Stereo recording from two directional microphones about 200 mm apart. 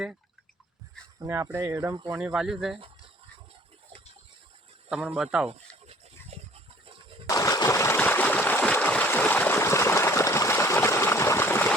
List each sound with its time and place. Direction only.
1.2 s speech: 15° right (ahead or behind)
2.1 s speech: 5° right (ahead or behind)
4.9 s speech: 5° right (ahead or behind)
6.3 s a sound: 30° right (ahead or behind)
6.8 s bird: 25° right (ahead or behind)
7.3 s a sound: 15° left (ahead or behind)